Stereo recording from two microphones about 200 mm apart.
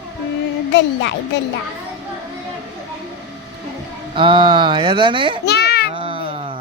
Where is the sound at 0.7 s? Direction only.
65° left (ahead or behind).